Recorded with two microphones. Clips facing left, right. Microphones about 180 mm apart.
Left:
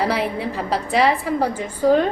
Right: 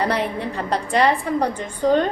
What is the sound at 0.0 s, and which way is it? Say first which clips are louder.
A woman's voice: left 1 dB; centre (ahead or behind).